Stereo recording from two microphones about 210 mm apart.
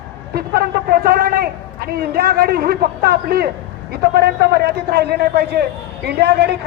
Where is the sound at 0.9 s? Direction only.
45° right (ahead or behind).